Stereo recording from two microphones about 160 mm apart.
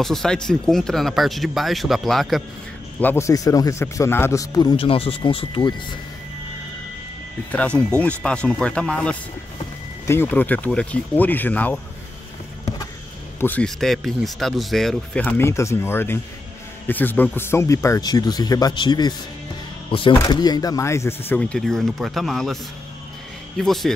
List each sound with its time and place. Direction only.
0.0 s speech: 5° left (ahead or behind)
3.0 s speech: 15° left (ahead or behind)
7.5 s speech: 5° left (ahead or behind)
13.4 s speech: 10° left (ahead or behind)
23.6 s speech: centre (ahead or behind)